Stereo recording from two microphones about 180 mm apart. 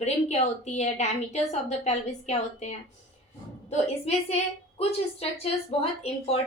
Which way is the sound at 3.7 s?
35° left (ahead or behind).